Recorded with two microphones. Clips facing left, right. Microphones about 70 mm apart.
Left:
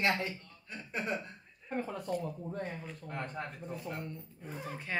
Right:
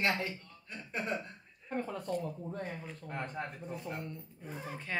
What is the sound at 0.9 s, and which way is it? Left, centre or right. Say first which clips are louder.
Chuckle: even; centre.